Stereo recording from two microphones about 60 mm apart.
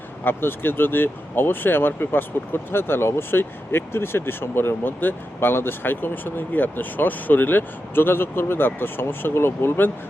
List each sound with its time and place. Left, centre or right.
0.3 s speech: left